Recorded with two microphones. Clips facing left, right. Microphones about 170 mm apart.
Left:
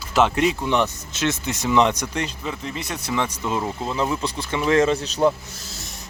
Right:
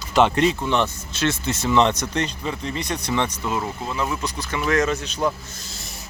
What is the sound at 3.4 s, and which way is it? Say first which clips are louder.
Speech: left 1 dB; 20° left (ahead or behind).